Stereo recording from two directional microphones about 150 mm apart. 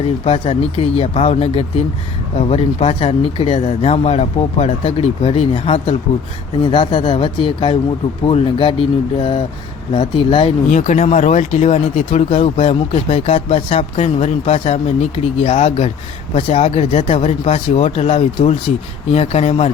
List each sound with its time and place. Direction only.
0.3 s speech: 40° left (ahead or behind)
10.7 s speech: 55° left (ahead or behind)